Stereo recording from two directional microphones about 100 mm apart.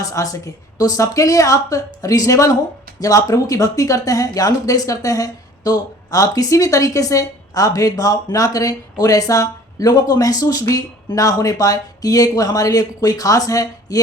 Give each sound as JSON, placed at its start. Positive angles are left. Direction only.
{"t": 0.0, "sound": "speech", "side_deg": 35}